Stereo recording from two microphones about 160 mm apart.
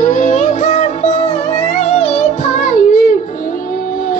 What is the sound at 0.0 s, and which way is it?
Music, 50° left (ahead or behind).